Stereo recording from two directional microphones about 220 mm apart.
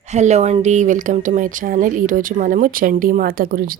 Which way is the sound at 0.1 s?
30° right (ahead or behind).